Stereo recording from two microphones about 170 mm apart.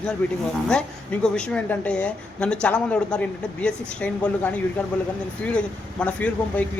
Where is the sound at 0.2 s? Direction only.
10° left (ahead or behind).